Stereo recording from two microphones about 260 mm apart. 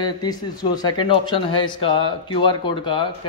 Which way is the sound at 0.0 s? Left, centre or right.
Centre.